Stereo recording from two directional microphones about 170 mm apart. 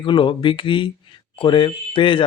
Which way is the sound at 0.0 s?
30° left (ahead or behind).